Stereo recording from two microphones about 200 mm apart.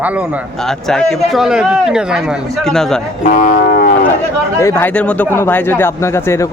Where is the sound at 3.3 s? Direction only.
40° left (ahead or behind).